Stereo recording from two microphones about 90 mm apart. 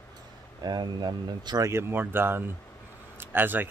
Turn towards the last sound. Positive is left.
turn(degrees=-20)  # may be behind; listen again after turning